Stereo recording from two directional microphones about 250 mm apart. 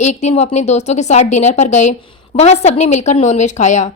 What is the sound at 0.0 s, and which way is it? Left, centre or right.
A woman's voice, left.